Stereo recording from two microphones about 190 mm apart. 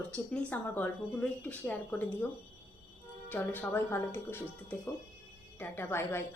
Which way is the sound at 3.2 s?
10° left (ahead or behind).